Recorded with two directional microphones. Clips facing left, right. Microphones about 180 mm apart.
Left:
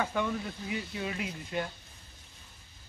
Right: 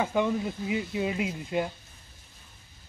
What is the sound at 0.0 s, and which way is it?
Speech, 20° right (ahead or behind).